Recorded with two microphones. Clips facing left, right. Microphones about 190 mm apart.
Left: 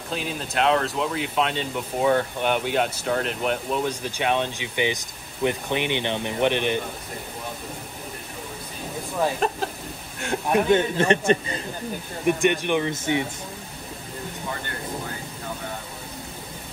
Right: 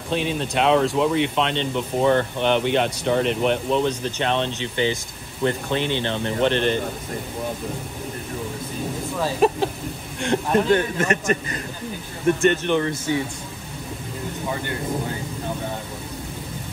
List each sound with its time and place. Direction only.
0.1 s speech: centre (ahead or behind)
9.4 s speech: 5° right (ahead or behind)
10.2 s a man's voice: 10° left (ahead or behind); by 11.6 s 30° left (ahead or behind)
12.3 s speech: 15° left (ahead or behind)